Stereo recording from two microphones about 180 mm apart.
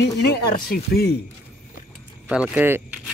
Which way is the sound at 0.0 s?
65° left (ahead or behind).